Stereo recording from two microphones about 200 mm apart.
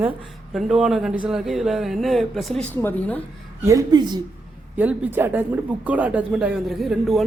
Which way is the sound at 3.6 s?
15° right (ahead or behind).